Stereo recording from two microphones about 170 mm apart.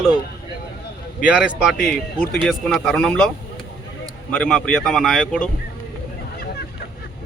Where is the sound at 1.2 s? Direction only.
5° right (ahead or behind).